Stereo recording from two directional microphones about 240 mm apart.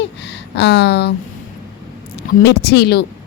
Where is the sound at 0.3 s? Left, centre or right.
Left.